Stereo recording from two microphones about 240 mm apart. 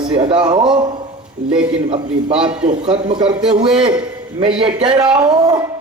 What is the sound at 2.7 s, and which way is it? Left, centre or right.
Speech, right.